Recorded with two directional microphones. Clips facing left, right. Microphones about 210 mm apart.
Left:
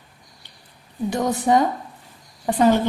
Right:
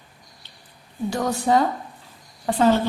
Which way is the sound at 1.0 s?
20° left (ahead or behind).